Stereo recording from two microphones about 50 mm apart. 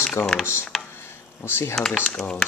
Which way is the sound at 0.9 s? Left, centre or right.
Left.